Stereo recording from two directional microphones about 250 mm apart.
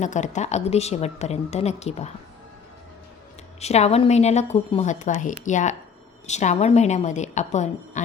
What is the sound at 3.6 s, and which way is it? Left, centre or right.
A woman's voice, left.